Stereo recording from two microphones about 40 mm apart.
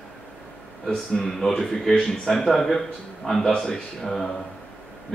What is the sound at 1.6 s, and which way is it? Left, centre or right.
A man's voice, centre.